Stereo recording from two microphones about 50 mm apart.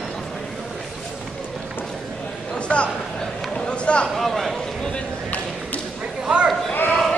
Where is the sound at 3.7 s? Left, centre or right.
Left.